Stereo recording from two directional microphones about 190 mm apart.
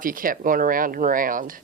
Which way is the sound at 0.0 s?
45° right (ahead or behind).